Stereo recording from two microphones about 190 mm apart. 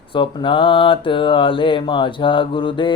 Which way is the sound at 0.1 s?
25° left (ahead or behind).